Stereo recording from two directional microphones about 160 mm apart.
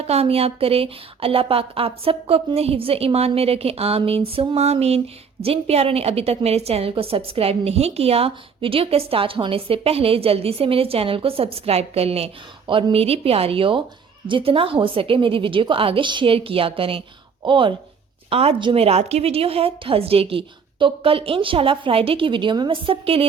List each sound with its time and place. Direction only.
0.0 s a woman's voice: 40° right (ahead or behind)